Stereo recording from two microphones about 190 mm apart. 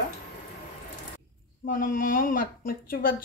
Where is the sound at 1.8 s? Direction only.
45° left (ahead or behind).